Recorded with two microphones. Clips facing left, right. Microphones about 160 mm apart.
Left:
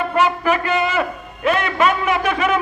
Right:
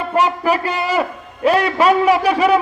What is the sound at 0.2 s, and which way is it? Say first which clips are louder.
A man's voice: right 2 dB; 35° right (ahead or behind).